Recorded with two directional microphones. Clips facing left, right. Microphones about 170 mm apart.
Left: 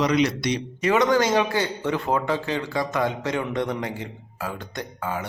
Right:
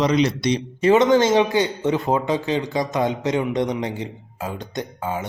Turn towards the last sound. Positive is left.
turn(degrees=-20)  # may be behind; listen again after turning